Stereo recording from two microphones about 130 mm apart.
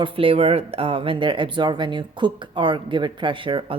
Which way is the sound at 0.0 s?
45° right (ahead or behind).